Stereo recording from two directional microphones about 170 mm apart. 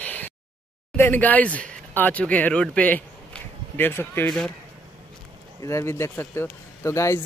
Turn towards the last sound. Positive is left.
turn(degrees=15)  # may be behind; listen again after turning